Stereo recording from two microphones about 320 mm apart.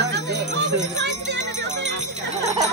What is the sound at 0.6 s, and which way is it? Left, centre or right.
Jingle bell, right.